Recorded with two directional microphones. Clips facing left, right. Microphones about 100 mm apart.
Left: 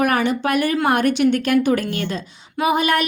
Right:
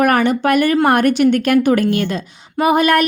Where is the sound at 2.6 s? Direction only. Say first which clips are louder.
Right 5 dB; 50° right (ahead or behind).